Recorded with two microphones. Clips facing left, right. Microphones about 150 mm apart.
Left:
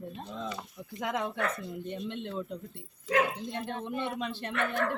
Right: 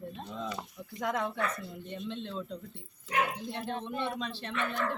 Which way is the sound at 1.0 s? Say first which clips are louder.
Even; 5° left (ahead or behind).